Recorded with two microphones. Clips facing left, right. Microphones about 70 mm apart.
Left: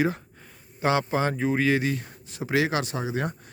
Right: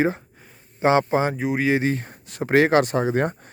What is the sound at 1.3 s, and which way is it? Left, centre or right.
Speech, centre.